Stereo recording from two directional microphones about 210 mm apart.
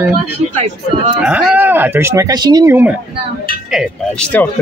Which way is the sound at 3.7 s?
Centre (ahead or behind).